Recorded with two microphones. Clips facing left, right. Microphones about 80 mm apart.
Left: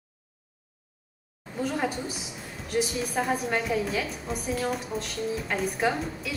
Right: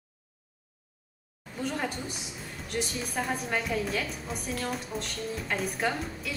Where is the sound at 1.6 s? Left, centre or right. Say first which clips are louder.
Left 4 dB; centre.